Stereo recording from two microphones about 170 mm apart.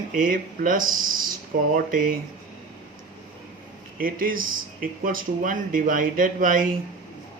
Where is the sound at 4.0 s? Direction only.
55° right (ahead or behind).